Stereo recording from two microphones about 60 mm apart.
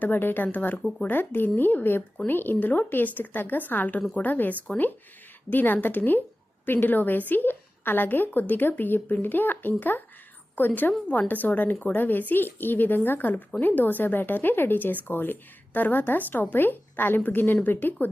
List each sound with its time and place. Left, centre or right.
0.0 s a woman's voice: left
0.8 s speech: centre
1.0 s a woman's voice: left
11.1 s a woman's voice: left